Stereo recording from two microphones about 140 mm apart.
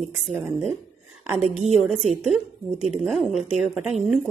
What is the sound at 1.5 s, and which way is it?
Speech, 55° right (ahead or behind).